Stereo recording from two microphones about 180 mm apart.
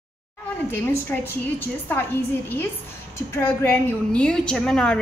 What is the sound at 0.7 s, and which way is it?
Speech, 10° left (ahead or behind).